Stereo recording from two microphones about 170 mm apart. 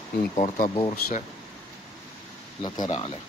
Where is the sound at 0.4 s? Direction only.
35° left (ahead or behind).